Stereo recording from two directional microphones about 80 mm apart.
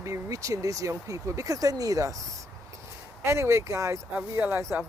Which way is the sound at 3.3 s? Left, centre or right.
Right.